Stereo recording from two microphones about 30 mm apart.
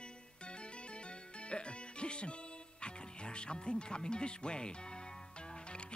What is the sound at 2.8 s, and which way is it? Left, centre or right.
Speech, left.